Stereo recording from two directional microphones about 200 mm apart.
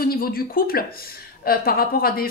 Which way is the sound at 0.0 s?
50° left (ahead or behind).